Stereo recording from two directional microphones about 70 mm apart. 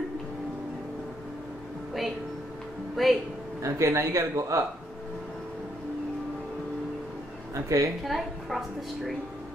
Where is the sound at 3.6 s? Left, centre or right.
Right.